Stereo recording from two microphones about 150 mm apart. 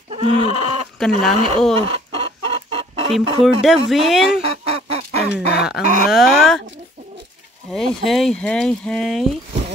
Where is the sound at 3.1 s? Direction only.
Centre (ahead or behind).